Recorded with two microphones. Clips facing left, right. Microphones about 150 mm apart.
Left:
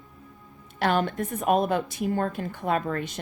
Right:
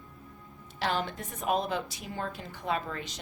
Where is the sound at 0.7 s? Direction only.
55° left (ahead or behind).